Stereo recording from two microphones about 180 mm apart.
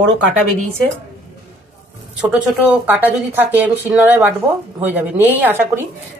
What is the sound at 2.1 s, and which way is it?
Speech, 5° right (ahead or behind).